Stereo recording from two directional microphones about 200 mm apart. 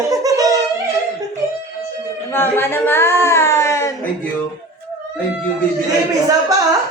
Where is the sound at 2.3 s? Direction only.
10° left (ahead or behind).